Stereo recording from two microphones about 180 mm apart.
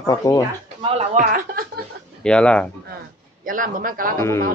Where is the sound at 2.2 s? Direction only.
5° left (ahead or behind).